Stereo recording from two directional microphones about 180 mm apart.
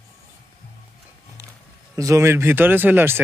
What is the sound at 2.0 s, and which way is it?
Speech, 15° right (ahead or behind).